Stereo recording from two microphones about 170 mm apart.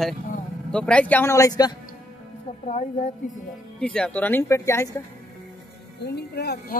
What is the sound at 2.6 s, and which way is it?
Speech, 45° left (ahead or behind).